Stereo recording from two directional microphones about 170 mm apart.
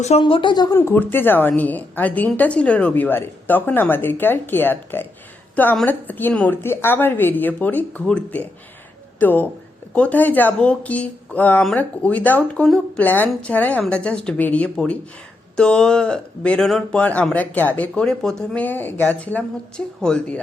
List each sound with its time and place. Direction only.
0.0 s speech: 35° left (ahead or behind)
0.8 s a woman's voice: 10° left (ahead or behind)